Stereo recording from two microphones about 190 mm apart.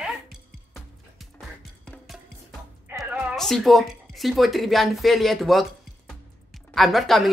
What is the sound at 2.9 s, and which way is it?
Speech, 5° right (ahead or behind).